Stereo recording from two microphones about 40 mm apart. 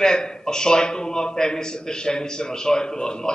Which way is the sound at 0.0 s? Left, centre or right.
Centre.